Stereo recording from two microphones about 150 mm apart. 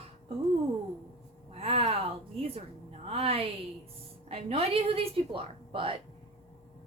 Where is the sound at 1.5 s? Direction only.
40° right (ahead or behind).